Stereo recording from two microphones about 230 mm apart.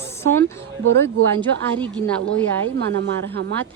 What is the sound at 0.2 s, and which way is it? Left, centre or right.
A woman's voice, centre.